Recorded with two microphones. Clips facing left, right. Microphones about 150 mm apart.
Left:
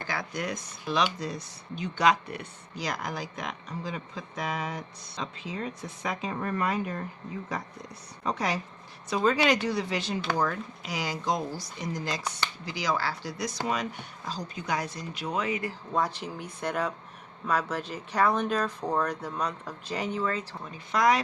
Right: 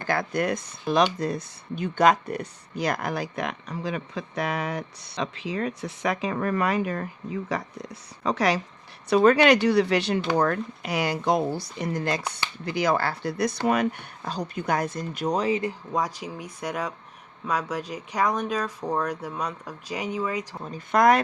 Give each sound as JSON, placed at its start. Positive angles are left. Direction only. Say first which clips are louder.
{"t": 0.1, "sound": "a woman's voice", "louder": "right 9 dB", "side_deg": -55}
{"t": 9.0, "sound": "speech", "louder": "right 7 dB", "side_deg": -65}
{"t": 15.9, "sound": "speech", "louder": "left 3 dB", "side_deg": -10}
{"t": 20.7, "sound": "speech", "louder": "right 5 dB", "side_deg": -50}